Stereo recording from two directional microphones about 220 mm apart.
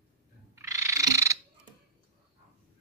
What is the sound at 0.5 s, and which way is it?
Frog, 15° right (ahead or behind).